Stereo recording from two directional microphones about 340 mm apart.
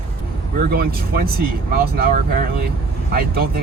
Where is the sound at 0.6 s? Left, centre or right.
Right.